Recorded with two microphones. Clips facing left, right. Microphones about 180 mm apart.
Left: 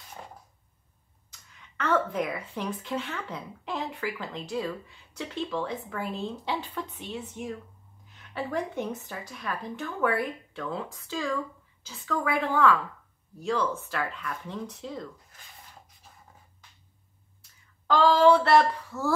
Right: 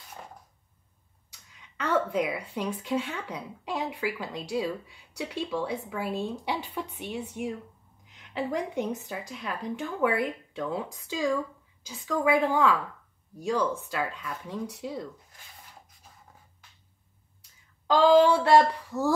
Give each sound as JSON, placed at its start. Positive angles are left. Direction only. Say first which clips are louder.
{"t": 1.8, "sound": "a woman's voice", "louder": "even", "side_deg": -10}
{"t": 17.8, "sound": "a woman's voice", "louder": "right 1 dB", "side_deg": -15}